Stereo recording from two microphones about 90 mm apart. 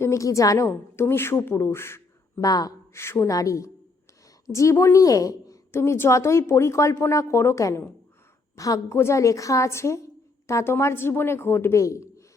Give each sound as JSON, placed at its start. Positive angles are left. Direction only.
{"t": 0.0, "sound": "a woman's voice", "side_deg": 35}
{"t": 2.4, "sound": "speech", "side_deg": 40}
{"t": 2.9, "sound": "a woman's voice", "side_deg": 30}